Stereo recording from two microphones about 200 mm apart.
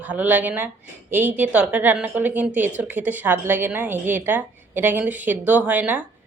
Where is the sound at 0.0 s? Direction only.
5° right (ahead or behind).